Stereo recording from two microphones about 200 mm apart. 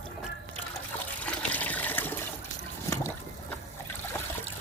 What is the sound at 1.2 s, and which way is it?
Water, 5° left (ahead or behind).